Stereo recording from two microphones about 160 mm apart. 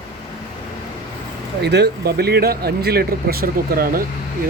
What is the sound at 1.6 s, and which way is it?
Speech, 90° right.